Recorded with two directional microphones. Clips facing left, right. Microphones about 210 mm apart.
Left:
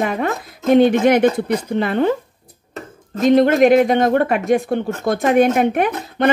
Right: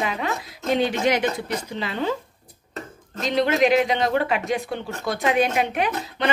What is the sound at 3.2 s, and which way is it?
Speech, 50° left (ahead or behind).